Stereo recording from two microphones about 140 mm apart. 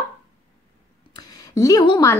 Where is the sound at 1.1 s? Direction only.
25° left (ahead or behind).